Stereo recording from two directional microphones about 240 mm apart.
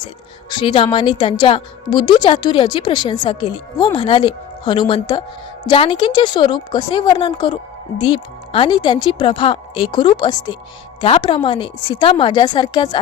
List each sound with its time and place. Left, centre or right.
0.5 s a woman's voice: left